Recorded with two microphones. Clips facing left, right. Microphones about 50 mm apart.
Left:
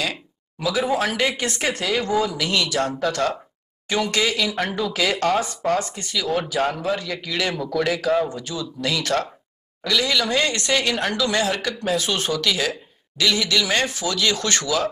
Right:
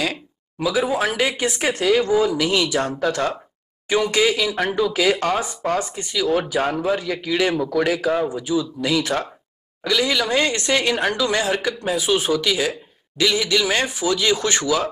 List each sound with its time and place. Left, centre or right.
0.6 s speech: centre